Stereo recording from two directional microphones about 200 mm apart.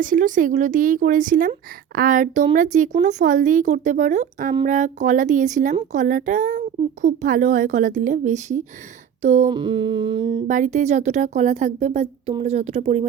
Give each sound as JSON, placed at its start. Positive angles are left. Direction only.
{"t": 0.0, "sound": "speech", "side_deg": -40}
{"t": 9.5, "sound": "humming", "side_deg": -25}
{"t": 10.4, "sound": "speech", "side_deg": -40}